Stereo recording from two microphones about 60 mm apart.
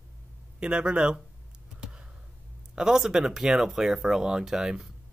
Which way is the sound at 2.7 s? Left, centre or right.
Centre.